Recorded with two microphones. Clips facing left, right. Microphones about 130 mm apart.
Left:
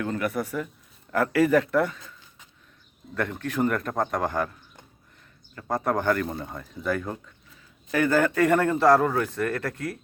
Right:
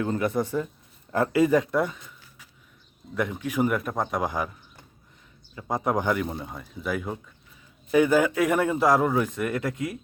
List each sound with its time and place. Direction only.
0.0 s a man's voice: 25° right (ahead or behind)
3.2 s a man's voice: 10° right (ahead or behind)